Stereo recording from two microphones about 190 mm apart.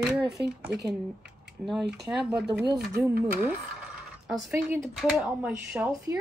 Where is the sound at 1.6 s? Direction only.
Centre (ahead or behind).